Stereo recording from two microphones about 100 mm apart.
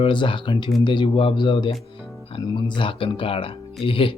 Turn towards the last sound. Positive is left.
turn(degrees=60)  # may be behind; listen again after turning